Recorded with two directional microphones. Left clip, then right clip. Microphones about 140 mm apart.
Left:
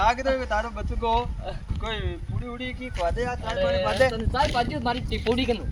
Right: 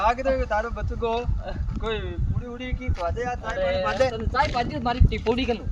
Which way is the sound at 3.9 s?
15° right (ahead or behind).